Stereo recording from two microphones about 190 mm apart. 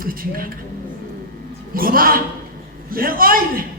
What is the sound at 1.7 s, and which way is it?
A woman's voice, 50° right (ahead or behind).